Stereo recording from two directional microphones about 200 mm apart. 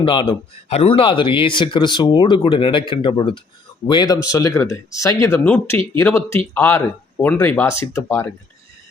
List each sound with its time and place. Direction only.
0.0 s speech: 25° left (ahead or behind)